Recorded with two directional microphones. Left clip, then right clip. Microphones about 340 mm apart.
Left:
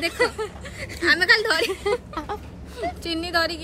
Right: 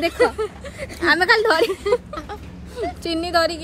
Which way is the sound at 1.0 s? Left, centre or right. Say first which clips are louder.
Right 2 dB; centre.